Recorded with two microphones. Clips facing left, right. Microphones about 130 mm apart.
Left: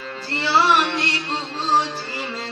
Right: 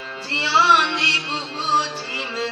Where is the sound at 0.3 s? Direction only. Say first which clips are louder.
Even; 40° left (ahead or behind).